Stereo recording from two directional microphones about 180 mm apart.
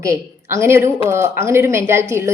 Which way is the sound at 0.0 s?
15° right (ahead or behind).